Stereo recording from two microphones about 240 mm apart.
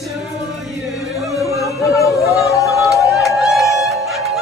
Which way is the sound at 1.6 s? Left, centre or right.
Centre.